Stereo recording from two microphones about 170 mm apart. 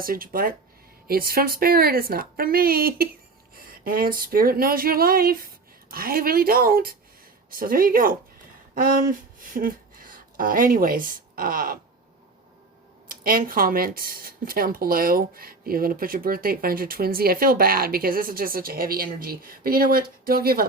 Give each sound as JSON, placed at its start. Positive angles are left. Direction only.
{"t": 0.0, "sound": "speech", "side_deg": -60}
{"t": 13.1, "sound": "speech", "side_deg": -55}